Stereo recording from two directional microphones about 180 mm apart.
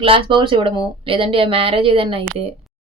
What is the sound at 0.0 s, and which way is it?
A woman's voice, 30° right (ahead or behind).